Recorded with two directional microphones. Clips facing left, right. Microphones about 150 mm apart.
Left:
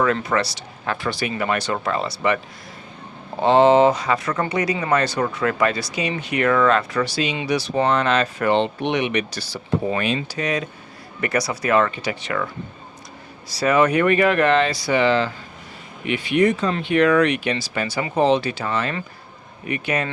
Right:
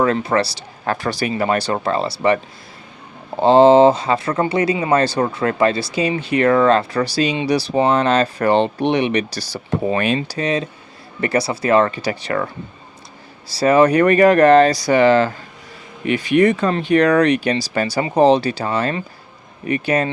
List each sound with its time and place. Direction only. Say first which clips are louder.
0.0 s speech: right 3 dB; 30° right (ahead or behind)
3.4 s speech: right 4 dB; 30° right (ahead or behind)
10.2 s speech: right 4 dB; 35° right (ahead or behind)
13.5 s speech: right 5 dB; 35° right (ahead or behind)
16.4 s speech: right 2 dB; 60° right (ahead or behind)
16.7 s speech: right 3 dB; 40° right (ahead or behind)